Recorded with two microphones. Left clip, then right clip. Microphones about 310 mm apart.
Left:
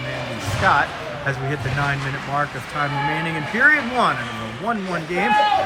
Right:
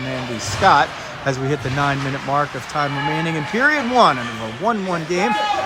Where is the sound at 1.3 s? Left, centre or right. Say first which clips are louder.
Right 5 dB; centre.